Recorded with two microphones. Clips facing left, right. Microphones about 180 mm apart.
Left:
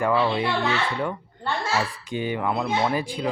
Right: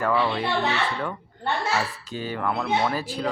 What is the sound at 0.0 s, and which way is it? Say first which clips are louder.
Speech: left 2 dB; 10° left (ahead or behind).